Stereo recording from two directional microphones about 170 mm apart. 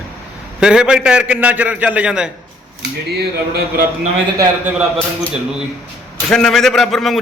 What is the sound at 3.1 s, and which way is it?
Speech, 70° right (ahead or behind).